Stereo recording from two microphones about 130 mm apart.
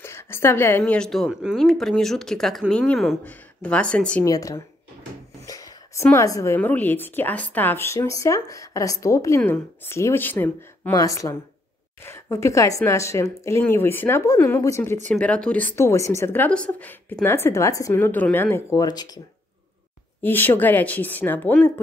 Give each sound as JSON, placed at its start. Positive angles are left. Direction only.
{"t": 0.0, "sound": "a woman's voice", "side_deg": 20}
{"t": 4.2, "sound": "a woman's voice", "side_deg": 25}
{"t": 5.5, "sound": "a sound", "side_deg": 25}
{"t": 6.1, "sound": "a woman's voice", "side_deg": 25}
{"t": 10.9, "sound": "a woman's voice", "side_deg": 25}
{"t": 15.0, "sound": "a woman's voice", "side_deg": 10}
{"t": 20.2, "sound": "a woman's voice", "side_deg": 15}